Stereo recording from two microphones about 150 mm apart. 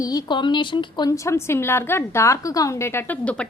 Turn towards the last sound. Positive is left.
turn(degrees=10)  # may be behind; listen again after turning